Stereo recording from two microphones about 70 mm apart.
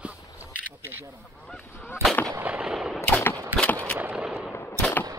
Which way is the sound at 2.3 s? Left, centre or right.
Centre.